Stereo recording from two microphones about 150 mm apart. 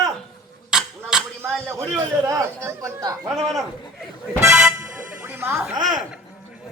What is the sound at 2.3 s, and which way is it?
Speech, 20° right (ahead or behind).